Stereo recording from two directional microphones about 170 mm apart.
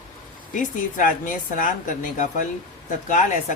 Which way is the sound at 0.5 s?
50° left (ahead or behind).